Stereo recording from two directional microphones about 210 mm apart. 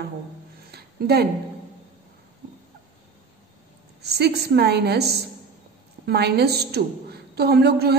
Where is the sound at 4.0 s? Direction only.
50° right (ahead or behind).